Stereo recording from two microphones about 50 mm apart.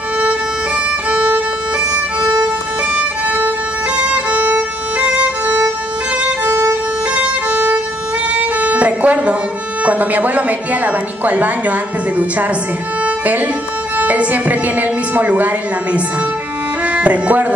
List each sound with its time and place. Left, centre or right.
1.1 s violin: right
2.9 s violin: right
8.3 s music: right
9.8 s a woman's voice: right
13.0 s music: right
13.9 s a woman's voice: right
16.8 s music: right